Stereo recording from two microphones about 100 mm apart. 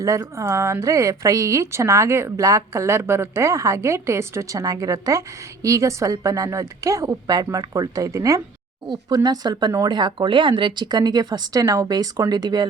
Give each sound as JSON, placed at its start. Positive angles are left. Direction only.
{"t": 0.0, "sound": "speech", "side_deg": -30}